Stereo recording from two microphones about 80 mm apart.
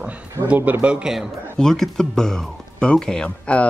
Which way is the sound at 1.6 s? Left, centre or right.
Centre.